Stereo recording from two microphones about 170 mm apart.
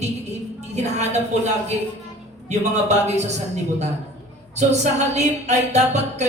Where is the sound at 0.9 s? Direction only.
40° right (ahead or behind).